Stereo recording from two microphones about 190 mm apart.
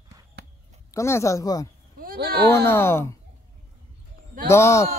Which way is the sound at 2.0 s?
50° right (ahead or behind).